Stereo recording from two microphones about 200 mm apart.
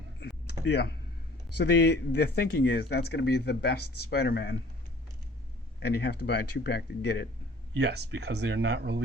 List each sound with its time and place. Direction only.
0.2 s a sound: 60° left (ahead or behind)
1.5 s speech: 55° left (ahead or behind)
5.8 s speech: 55° left (ahead or behind)
7.8 s speech: 60° right (ahead or behind)